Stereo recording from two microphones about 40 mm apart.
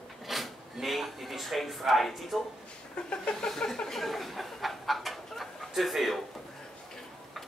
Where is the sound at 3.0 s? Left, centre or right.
Left.